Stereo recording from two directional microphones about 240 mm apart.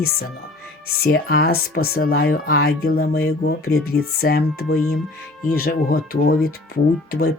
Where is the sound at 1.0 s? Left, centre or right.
Left.